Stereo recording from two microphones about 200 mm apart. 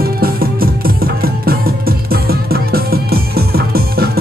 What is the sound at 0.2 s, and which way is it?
Music, 45° right (ahead or behind).